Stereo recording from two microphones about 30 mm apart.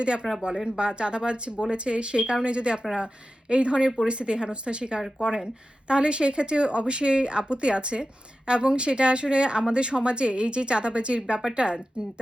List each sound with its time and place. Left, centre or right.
0.0 s speech: right